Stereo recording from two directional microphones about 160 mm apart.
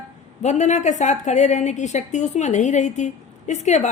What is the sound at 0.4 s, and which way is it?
A woman's voice, 45° left (ahead or behind).